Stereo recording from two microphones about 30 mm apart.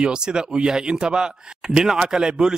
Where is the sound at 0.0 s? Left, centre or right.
Right.